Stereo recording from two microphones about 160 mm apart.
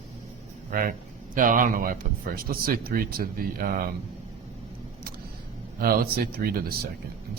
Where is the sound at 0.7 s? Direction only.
60° right (ahead or behind).